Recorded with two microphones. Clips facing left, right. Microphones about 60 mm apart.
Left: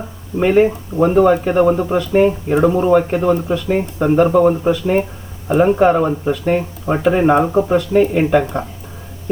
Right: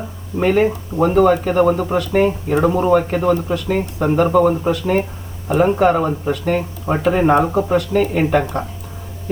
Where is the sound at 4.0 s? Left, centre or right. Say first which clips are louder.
Left 2 dB; centre.